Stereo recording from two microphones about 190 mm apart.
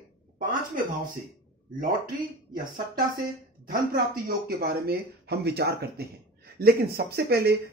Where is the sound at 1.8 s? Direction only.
45° right (ahead or behind).